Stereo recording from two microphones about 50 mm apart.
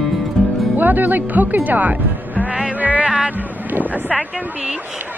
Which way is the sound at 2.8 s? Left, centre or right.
Right.